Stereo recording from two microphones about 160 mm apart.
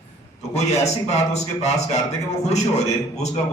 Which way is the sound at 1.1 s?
45° left (ahead or behind).